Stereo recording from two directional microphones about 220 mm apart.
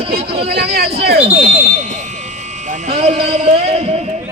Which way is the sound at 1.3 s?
30° right (ahead or behind).